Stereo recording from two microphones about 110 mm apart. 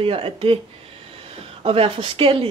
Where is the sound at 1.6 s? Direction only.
60° right (ahead or behind).